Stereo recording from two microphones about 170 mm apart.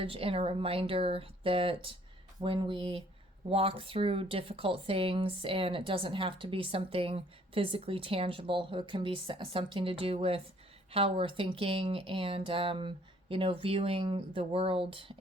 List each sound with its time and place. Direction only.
0.0 s speech: 35° right (ahead or behind)